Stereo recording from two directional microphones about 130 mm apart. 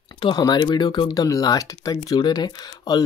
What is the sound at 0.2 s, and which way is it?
Speech, 35° left (ahead or behind).